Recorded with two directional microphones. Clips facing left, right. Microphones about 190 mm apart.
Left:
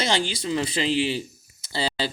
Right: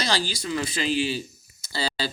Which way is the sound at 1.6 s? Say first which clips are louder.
Left 2 dB; 25° left (ahead or behind).